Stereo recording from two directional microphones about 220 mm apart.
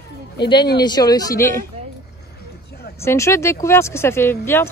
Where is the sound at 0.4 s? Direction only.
20° left (ahead or behind).